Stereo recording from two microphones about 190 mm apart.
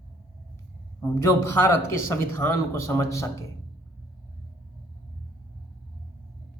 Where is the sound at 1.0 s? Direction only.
15° left (ahead or behind).